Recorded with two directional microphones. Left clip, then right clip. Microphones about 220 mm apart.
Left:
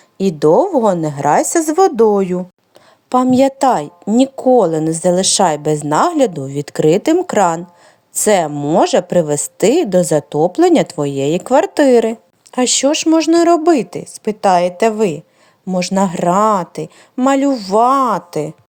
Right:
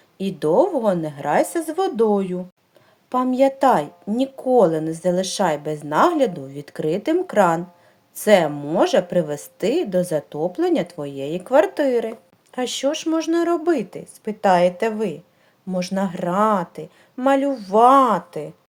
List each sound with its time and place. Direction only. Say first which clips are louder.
0.2 s a woman's voice: left 7 dB; 35° left (ahead or behind)